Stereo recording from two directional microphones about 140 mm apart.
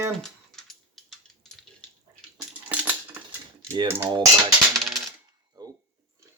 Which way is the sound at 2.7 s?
10° right (ahead or behind).